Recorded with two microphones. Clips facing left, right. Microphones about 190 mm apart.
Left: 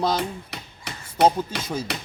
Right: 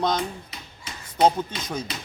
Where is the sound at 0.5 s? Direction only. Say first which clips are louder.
Left 4 dB; 70° left (ahead or behind).